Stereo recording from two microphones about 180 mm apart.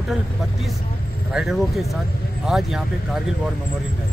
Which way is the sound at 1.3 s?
Centre (ahead or behind).